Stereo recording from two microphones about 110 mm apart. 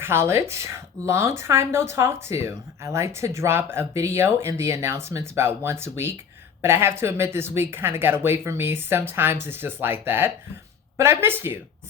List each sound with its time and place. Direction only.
0.0 s a woman's voice: 25° right (ahead or behind)